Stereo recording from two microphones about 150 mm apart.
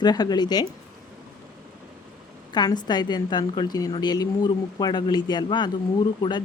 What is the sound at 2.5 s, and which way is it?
Speech, 30° left (ahead or behind).